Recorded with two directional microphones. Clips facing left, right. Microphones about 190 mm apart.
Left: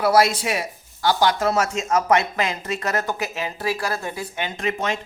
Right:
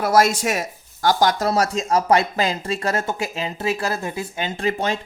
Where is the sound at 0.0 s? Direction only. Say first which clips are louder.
Even; 45° right (ahead or behind).